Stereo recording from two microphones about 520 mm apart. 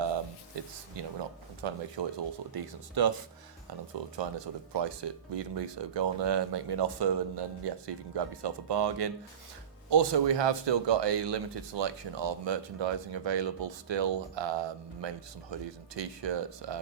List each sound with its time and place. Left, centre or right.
0.9 s a sound: right
1.6 s speech: right
2.5 s speech: right
4.0 s speech: right